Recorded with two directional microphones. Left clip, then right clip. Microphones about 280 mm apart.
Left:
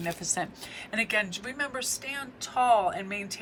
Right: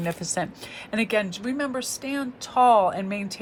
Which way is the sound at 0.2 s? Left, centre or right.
Right.